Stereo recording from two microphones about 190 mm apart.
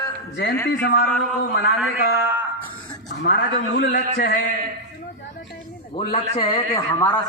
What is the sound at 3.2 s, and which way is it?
Speech, 65° left (ahead or behind).